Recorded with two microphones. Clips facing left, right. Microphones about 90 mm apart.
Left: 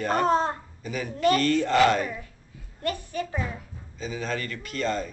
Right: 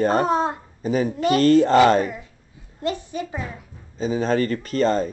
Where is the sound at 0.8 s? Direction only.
35° right (ahead or behind).